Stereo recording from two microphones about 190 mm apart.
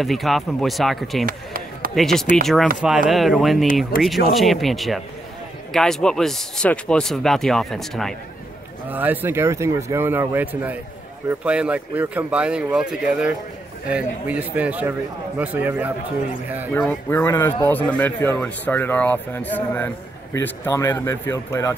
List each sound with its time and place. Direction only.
0.0 s speech: centre (ahead or behind)
1.2 s chop: 50° right (ahead or behind)
2.0 s speech: centre (ahead or behind)
8.9 s a man's voice: 10° right (ahead or behind)
16.7 s a man's voice: 10° left (ahead or behind)